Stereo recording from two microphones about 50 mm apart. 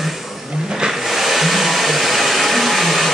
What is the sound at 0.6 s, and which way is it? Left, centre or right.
Vehicle, centre.